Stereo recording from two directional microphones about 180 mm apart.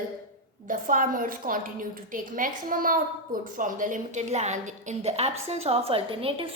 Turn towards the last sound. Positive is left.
turn(degrees=-30)  # may be behind; listen again after turning